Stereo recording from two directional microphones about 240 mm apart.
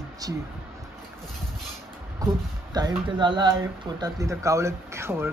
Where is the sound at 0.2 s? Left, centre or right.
Centre.